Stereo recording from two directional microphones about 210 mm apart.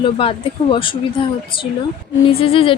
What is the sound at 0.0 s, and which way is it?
Speech, 25° left (ahead or behind).